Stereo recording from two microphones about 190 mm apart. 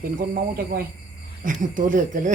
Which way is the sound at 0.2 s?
45° right (ahead or behind).